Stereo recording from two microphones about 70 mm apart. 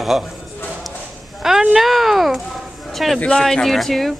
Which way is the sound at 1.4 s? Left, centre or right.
Centre.